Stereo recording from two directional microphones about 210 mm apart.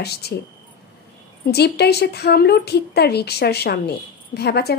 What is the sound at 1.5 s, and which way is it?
A woman's voice, 50° left (ahead or behind).